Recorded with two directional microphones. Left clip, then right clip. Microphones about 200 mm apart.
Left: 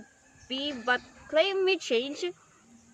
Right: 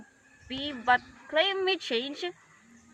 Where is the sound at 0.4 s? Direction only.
5° left (ahead or behind).